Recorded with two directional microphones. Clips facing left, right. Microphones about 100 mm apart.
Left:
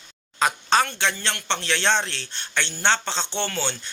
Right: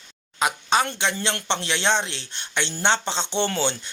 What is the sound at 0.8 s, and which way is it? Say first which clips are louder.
Speech: right 1 dB; 20° right (ahead or behind).